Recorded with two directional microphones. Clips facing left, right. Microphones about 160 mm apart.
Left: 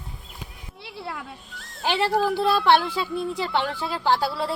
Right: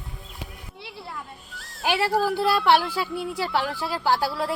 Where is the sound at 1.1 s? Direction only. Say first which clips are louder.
Left 3 dB; 75° left (ahead or behind).